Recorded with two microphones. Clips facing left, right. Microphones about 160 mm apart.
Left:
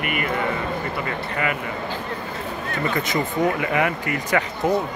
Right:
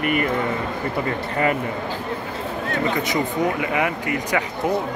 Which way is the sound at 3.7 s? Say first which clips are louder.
Even; 15° right (ahead or behind).